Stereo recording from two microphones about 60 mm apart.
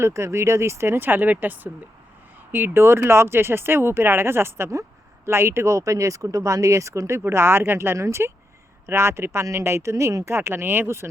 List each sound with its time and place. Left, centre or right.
0.0 s speech: right
7.3 s speech: right
7.9 s speech: right
10.3 s speech: right